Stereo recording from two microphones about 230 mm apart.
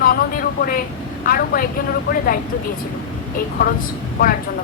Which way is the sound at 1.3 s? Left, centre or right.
Left.